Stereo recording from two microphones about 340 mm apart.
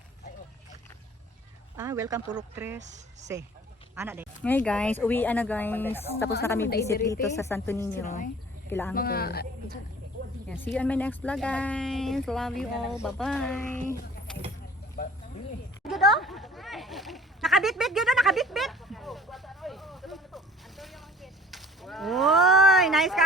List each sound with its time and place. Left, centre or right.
1.7 s speech: centre
2.8 s speech: right
3.9 s speech: centre
4.4 s a woman's voice: centre
8.0 s a woman's voice: left
8.7 s speech: centre
9.0 s a woman's voice: left
10.8 s speech: centre
13.8 s a sound: centre
15.9 s a sound: centre